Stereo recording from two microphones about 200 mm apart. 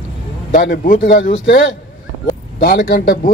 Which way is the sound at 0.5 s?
45° left (ahead or behind).